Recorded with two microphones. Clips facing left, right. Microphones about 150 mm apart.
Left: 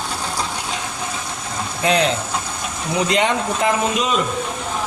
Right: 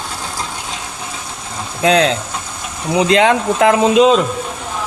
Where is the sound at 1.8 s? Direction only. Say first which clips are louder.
Right 5 dB; 90° right.